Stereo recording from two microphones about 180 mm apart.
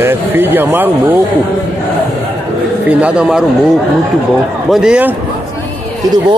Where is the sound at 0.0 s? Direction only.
10° right (ahead or behind).